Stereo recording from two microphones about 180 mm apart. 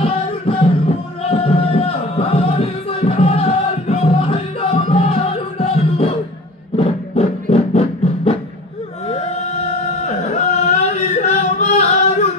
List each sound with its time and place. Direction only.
0.0 s music: 30° left (ahead or behind)
6.8 s a sound: 35° left (ahead or behind)
10.0 s singing: 40° left (ahead or behind)